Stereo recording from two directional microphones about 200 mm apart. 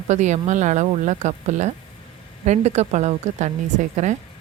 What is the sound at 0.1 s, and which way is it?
A woman's voice, 35° right (ahead or behind).